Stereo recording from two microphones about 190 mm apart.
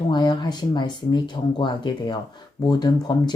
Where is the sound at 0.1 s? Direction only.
20° left (ahead or behind).